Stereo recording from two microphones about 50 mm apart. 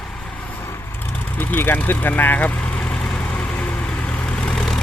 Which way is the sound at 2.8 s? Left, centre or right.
Left.